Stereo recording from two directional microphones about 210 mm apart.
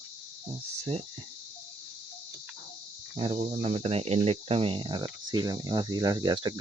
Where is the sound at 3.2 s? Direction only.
30° right (ahead or behind).